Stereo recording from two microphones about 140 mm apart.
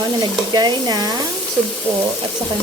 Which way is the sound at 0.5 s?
30° right (ahead or behind).